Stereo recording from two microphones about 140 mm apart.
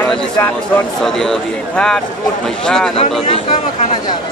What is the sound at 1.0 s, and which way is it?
Speech, 5° left (ahead or behind).